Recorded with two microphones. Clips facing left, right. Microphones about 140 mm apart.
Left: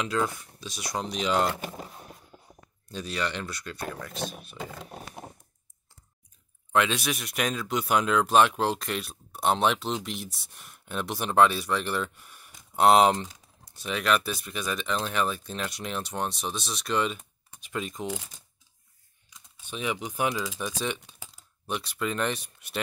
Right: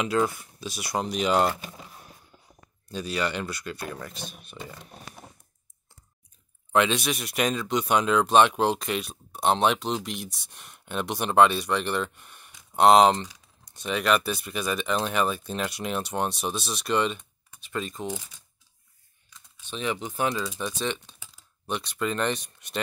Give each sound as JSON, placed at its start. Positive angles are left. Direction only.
{"t": 0.2, "sound": "speech", "side_deg": -5}
{"t": 1.6, "sound": "a sound", "side_deg": 45}
{"t": 2.9, "sound": "speech", "side_deg": 0}
{"t": 6.7, "sound": "speech", "side_deg": 0}
{"t": 19.3, "sound": "speech", "side_deg": 10}